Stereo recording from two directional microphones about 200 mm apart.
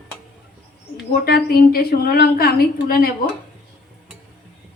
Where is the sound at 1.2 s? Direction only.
50° left (ahead or behind).